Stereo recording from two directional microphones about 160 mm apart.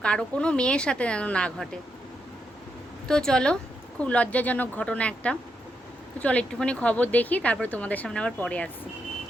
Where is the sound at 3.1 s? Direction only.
5° left (ahead or behind).